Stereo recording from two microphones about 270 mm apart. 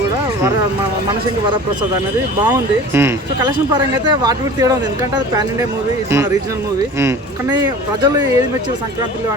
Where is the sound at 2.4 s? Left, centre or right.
Centre.